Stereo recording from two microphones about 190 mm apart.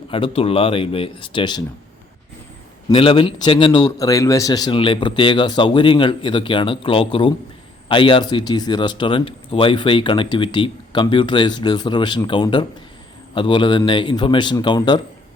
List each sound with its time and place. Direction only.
0.1 s speech: 30° left (ahead or behind)
2.9 s speech: 25° left (ahead or behind)